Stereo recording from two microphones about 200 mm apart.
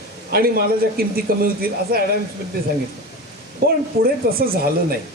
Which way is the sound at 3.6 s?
50° right (ahead or behind).